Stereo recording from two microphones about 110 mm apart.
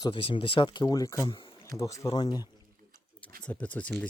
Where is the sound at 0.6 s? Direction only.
40° left (ahead or behind).